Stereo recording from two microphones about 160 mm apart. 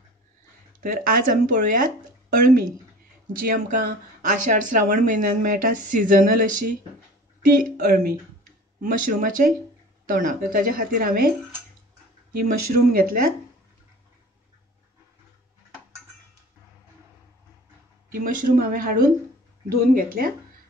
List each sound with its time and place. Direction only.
0.7 s speech: 65° right (ahead or behind)
7.8 s speech: 60° right (ahead or behind)
12.4 s speech: 60° right (ahead or behind)
18.2 s speech: 60° right (ahead or behind)